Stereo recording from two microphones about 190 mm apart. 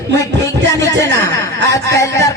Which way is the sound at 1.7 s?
15° left (ahead or behind).